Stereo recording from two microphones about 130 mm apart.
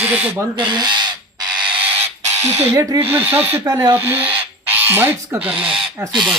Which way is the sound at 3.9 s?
15° right (ahead or behind).